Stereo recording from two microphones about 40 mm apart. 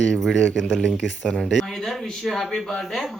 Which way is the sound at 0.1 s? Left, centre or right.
Centre.